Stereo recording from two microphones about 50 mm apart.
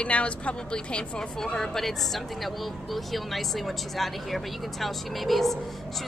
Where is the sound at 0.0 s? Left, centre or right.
Left.